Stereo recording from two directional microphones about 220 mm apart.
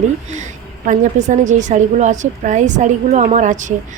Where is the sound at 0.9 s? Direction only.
35° right (ahead or behind).